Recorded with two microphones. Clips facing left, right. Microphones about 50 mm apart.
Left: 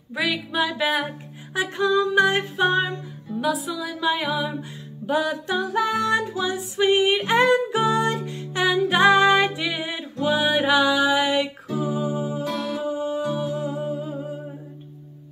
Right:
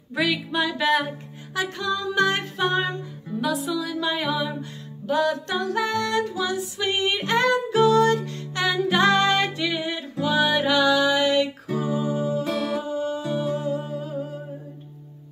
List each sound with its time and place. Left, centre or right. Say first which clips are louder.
0.1 s music: right 1 dB; centre
1.5 s music: left 5 dB; left
13.6 s humming: left 1 dB; centre